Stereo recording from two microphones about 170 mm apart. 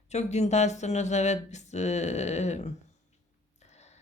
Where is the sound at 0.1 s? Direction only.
40° left (ahead or behind).